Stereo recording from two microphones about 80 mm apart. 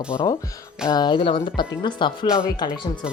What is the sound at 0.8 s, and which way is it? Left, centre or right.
Speech, left.